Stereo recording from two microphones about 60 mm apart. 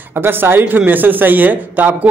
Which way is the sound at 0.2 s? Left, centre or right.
Right.